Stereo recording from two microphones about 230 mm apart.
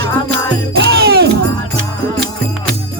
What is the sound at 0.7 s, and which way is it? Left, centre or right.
Music, right.